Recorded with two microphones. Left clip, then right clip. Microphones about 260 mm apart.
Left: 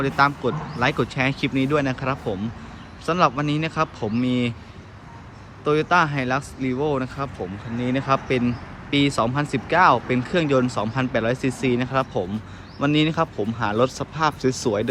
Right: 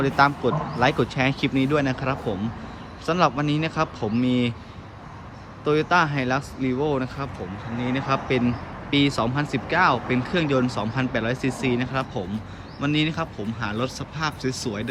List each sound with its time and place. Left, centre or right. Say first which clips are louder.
0.0 s speech: even; centre
5.6 s speech: left 1 dB; centre